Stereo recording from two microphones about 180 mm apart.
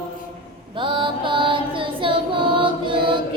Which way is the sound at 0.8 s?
25° right (ahead or behind).